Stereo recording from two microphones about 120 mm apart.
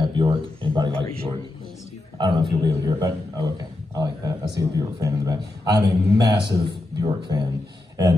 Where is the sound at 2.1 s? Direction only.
40° right (ahead or behind).